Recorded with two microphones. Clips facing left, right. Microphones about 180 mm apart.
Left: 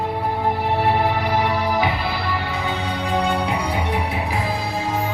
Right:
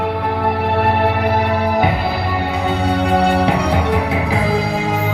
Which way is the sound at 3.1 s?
65° right (ahead or behind).